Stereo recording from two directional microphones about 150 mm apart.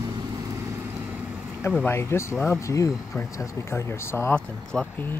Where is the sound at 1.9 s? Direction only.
15° left (ahead or behind).